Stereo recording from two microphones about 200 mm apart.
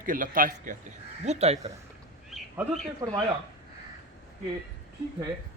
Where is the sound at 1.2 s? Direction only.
30° right (ahead or behind).